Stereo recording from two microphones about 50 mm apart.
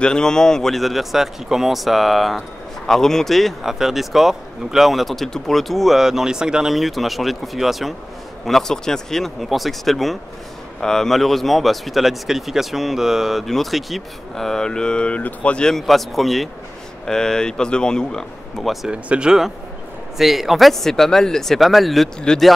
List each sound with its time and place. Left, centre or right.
0.0 s speech: centre
3.6 s speech: centre
6.7 s speech: centre
8.5 s speech: centre; by 15.6 s left
15.6 s speech: centre
17.0 s speech: centre
18.6 s speech: centre
18.9 s speech: right
20.2 s speech: centre